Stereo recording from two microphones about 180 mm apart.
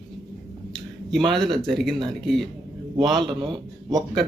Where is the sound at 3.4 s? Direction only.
25° right (ahead or behind).